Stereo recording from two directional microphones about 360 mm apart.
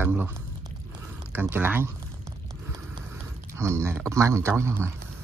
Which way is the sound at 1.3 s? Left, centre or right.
Centre.